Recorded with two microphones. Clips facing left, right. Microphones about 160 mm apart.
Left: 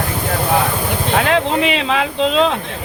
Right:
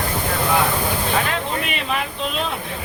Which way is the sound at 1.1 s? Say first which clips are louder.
Left 7 dB; 85° left.